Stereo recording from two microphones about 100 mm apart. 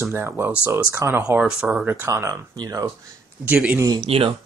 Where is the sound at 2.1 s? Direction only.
35° right (ahead or behind).